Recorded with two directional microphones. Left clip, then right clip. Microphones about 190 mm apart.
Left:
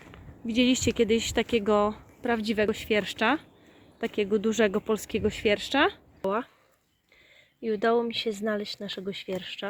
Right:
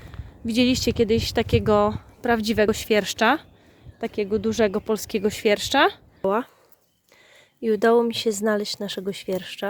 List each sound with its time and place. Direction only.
0.1 s speech: 20° right (ahead or behind)
4.0 s speech: centre (ahead or behind)
7.6 s speech: 30° right (ahead or behind)